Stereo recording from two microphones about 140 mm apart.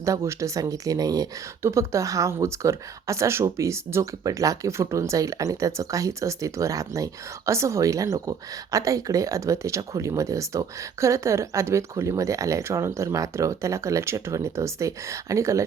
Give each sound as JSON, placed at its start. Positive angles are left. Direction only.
{"t": 0.0, "sound": "speech", "side_deg": -20}